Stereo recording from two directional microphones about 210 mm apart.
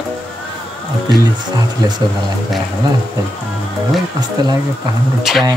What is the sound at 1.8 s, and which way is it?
Speech, 20° right (ahead or behind).